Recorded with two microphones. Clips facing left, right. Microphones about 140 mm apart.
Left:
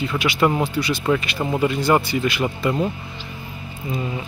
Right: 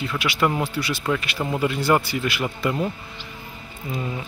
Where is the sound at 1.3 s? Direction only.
15° left (ahead or behind).